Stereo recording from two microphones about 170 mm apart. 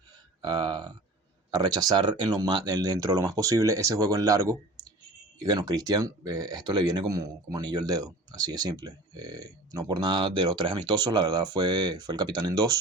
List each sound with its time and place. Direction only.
0.4 s speech: 25° right (ahead or behind)